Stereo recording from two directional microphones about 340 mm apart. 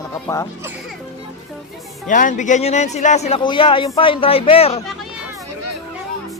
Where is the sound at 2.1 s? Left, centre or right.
Left.